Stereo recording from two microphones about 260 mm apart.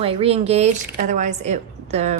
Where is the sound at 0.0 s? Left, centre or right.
Right.